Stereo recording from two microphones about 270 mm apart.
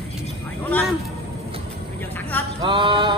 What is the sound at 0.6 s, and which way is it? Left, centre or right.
Speech, centre.